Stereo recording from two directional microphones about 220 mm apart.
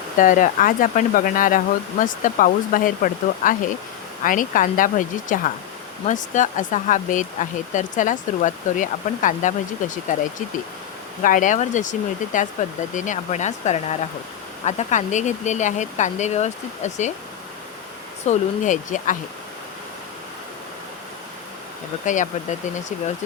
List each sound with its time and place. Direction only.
0.2 s speech: 35° left (ahead or behind)
11.2 s speech: 35° left (ahead or behind)
18.3 s speech: 35° left (ahead or behind)
22.0 s speech: 35° left (ahead or behind)